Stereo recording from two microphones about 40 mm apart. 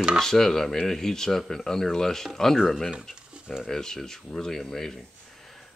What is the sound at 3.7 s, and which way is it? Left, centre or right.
Speech, centre.